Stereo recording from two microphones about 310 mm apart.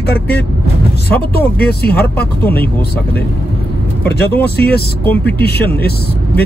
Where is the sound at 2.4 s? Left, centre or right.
Centre.